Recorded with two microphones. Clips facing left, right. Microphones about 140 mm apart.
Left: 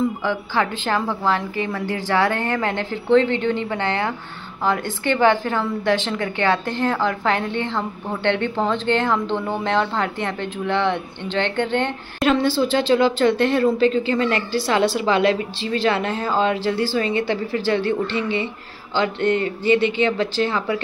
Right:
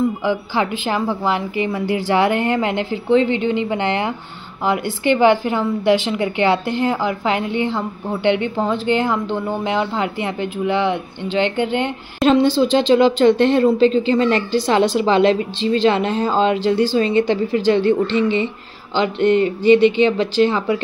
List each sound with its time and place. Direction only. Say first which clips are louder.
0.2 s a woman's voice: right 2 dB; 15° right (ahead or behind)
12.2 s a woman's voice: right 4 dB; 20° right (ahead or behind)